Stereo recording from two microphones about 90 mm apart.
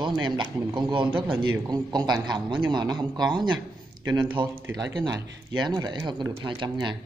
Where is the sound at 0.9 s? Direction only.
65° right (ahead or behind).